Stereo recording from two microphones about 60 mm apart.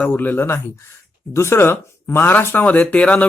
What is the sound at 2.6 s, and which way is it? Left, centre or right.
Speech, left.